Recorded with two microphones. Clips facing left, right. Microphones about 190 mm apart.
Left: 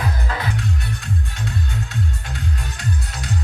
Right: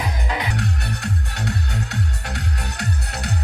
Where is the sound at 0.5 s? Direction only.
65° right (ahead or behind).